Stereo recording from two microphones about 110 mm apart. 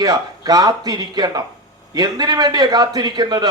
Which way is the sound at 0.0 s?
40° right (ahead or behind).